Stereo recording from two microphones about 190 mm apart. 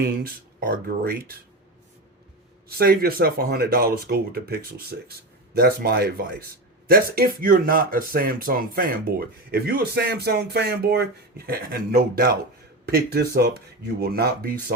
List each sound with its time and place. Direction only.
0.2 s speech: 50° right (ahead or behind)
2.6 s speech: 50° right (ahead or behind)